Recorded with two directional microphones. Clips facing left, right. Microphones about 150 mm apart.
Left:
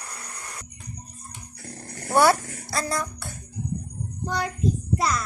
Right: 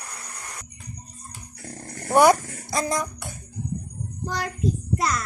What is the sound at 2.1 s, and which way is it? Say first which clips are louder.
Speech: right 3 dB; 15° right (ahead or behind).